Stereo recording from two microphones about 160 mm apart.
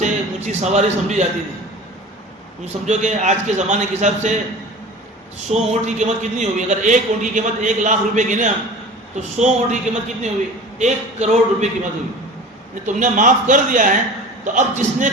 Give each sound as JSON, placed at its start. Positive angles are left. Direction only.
{"t": 0.0, "sound": "a man's voice", "side_deg": -45}
{"t": 2.8, "sound": "a man's voice", "side_deg": -45}
{"t": 5.5, "sound": "a man's voice", "side_deg": -45}
{"t": 12.8, "sound": "a man's voice", "side_deg": -50}